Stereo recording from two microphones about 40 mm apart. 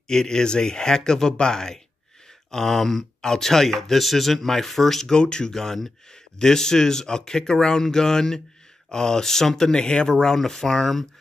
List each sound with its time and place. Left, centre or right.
0.1 s speech: centre
5.1 s speech: centre